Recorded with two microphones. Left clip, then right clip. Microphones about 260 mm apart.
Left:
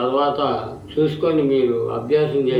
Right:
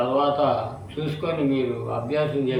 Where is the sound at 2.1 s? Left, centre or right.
Centre.